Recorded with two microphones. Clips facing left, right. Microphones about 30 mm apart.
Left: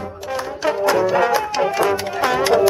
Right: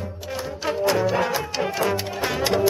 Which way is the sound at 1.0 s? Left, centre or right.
Centre.